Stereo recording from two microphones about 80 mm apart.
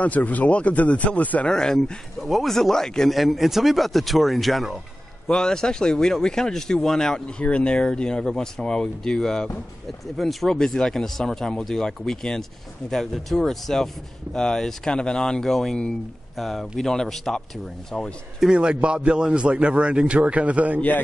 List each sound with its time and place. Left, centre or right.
0.0 s speech: centre
1.5 s speech: centre
18.4 s a man's voice: centre